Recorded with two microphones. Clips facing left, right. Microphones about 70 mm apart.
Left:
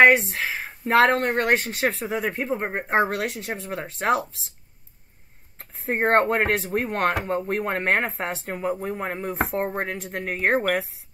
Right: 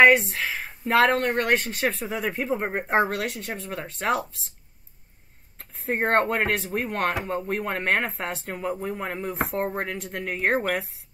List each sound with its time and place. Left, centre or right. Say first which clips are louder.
0.0 s speech: left 1 dB; centre
1.3 s speech: left 1 dB; left
1.9 s speech: left 2 dB; centre
5.6 s speech: left 2 dB; centre
6.7 s speech: left 3 dB; left
8.3 s speech: left 2 dB; centre